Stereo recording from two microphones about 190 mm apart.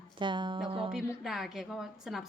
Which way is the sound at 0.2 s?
25° right (ahead or behind).